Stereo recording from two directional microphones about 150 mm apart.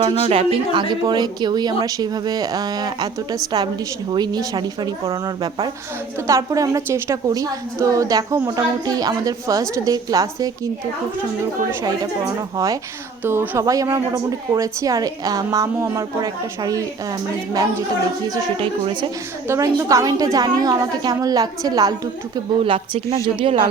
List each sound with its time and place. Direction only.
0.2 s a woman's voice: 40° right (ahead or behind)
11.8 s a woman's voice: 25° right (ahead or behind)
19.5 s a woman's voice: 20° right (ahead or behind)
22.6 s speech: 35° right (ahead or behind)